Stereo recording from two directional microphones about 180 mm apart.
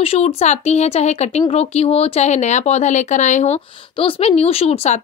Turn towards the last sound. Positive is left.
turn(degrees=35)  # may be behind; listen again after turning